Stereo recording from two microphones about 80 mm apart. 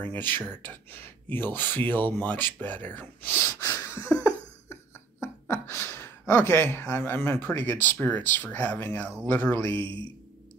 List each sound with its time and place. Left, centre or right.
0.0 s speech: left
5.2 s speech: left
9.8 s a man's voice: right